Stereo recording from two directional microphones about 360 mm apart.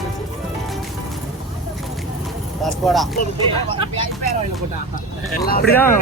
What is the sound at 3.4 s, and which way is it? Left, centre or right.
Speech, centre.